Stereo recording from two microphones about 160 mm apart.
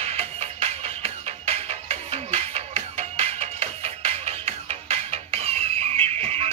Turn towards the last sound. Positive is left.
turn(degrees=-40)  # may be behind; listen again after turning